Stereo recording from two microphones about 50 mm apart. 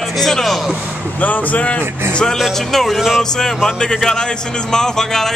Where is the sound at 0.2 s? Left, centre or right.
Centre.